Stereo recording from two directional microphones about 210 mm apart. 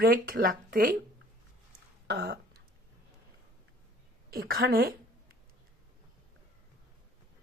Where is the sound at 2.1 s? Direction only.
50° right (ahead or behind).